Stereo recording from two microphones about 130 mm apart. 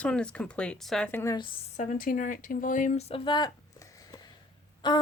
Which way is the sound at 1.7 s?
90° left.